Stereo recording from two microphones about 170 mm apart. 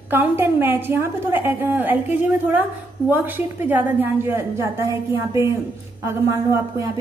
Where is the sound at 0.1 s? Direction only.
10° right (ahead or behind).